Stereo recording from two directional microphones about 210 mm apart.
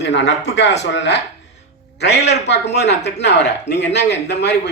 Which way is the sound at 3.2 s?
55° left (ahead or behind).